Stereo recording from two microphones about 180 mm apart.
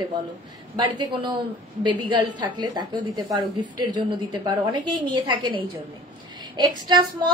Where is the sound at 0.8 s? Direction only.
25° right (ahead or behind).